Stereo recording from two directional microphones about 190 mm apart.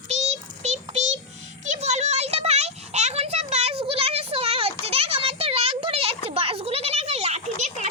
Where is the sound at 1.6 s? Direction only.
40° right (ahead or behind).